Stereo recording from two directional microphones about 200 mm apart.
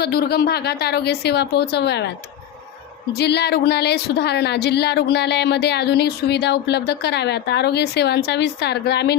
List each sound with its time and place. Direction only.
0.0 s a woman's voice: 50° left (ahead or behind)
3.1 s a woman's voice: 55° left (ahead or behind)